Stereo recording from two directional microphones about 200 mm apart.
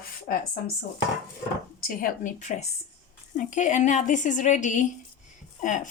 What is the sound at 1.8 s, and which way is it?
A woman's voice, 40° left (ahead or behind).